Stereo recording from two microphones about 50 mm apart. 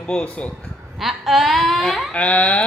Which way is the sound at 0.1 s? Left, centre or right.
Left.